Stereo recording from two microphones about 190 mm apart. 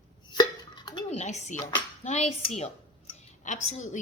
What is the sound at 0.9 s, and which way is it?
Speech, 25° left (ahead or behind).